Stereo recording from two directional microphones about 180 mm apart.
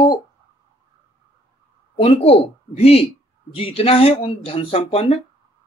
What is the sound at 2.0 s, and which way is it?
A man's voice, 35° left (ahead or behind).